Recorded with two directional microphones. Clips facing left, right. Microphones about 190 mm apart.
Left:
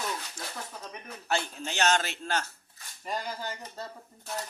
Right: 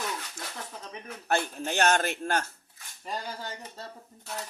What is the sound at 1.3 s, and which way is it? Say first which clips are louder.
A man's voice: right 3 dB; 50° right (ahead or behind).